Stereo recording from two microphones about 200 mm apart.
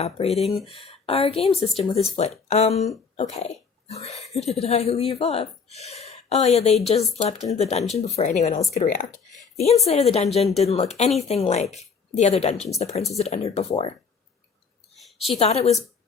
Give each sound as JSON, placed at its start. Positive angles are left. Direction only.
{"t": 0.0, "sound": "speech", "side_deg": 30}
{"t": 14.9, "sound": "a sound", "side_deg": 0}
{"t": 15.3, "sound": "speech", "side_deg": 30}